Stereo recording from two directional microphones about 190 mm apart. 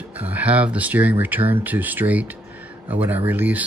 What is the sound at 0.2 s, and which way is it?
Speech, 10° right (ahead or behind).